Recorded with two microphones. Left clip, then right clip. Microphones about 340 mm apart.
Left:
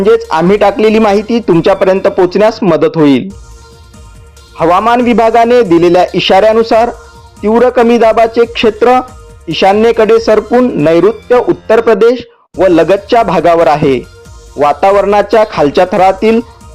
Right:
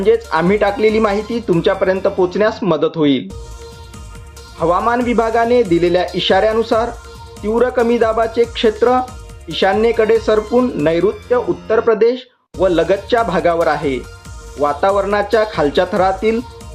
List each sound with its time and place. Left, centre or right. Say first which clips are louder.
0.3 s speech: left 6 dB; left
4.5 s speech: left 7 dB; left